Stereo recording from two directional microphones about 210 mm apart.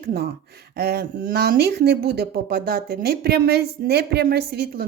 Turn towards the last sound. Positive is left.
turn(degrees=-50)  # may be behind; listen again after turning